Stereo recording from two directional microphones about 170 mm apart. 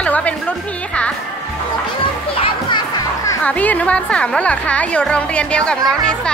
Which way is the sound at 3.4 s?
10° left (ahead or behind).